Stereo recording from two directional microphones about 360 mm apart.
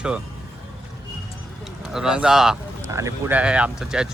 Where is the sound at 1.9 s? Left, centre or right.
Centre.